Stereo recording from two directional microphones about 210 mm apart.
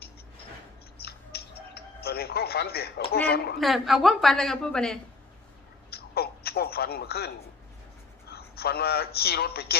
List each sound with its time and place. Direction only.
0.9 s music: 50° left (ahead or behind)
3.2 s speech: 50° left (ahead or behind)
3.6 s a woman's voice: centre (ahead or behind)
5.9 s a sound: 50° left (ahead or behind)
8.3 s a man's voice: 50° left (ahead or behind)